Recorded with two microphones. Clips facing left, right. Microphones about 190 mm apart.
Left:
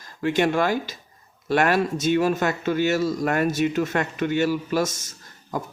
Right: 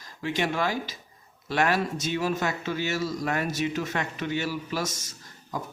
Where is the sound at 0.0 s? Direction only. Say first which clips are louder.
Left 7 dB; 55° left (ahead or behind).